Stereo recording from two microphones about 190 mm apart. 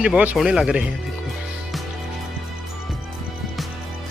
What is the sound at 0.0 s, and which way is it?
Speech, 5° right (ahead or behind).